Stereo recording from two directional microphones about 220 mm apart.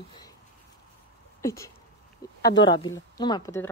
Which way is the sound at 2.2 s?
40° left (ahead or behind).